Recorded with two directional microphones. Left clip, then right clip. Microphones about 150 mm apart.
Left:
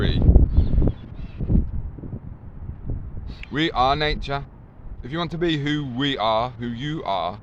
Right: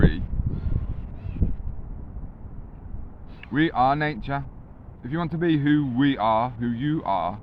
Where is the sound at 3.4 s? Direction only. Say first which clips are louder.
Left 1 dB; 15° left (ahead or behind).